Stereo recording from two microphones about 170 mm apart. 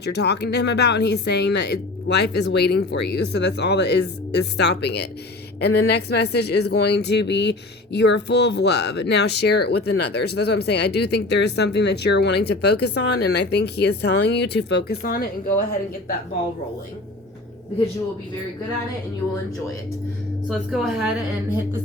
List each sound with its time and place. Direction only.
0.0 s speech: 75° left (ahead or behind); by 15.6 s 60° left (ahead or behind)
20.5 s a woman's voice: centre (ahead or behind)